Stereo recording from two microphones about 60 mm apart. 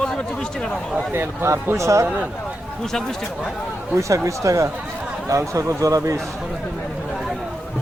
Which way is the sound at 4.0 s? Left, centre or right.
Right.